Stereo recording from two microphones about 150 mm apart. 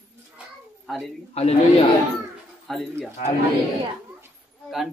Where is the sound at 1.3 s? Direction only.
45° left (ahead or behind).